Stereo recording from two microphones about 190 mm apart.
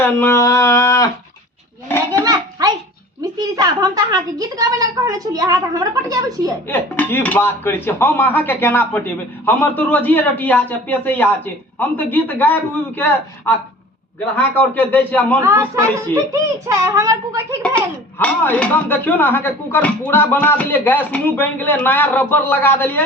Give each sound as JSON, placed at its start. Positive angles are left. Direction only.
{"t": 0.0, "sound": "speech", "side_deg": 10}
{"t": 2.2, "sound": "hands", "side_deg": -20}
{"t": 3.3, "sound": "a woman's voice", "side_deg": -20}
{"t": 6.7, "sound": "speech", "side_deg": 10}
{"t": 15.4, "sound": "a child's voice", "side_deg": -15}
{"t": 17.7, "sound": "speech", "side_deg": 10}